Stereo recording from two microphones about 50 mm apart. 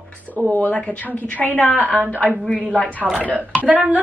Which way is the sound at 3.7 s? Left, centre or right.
Right.